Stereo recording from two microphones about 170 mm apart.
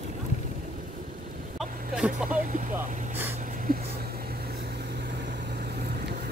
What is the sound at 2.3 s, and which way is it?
Vehicle, 50° right (ahead or behind).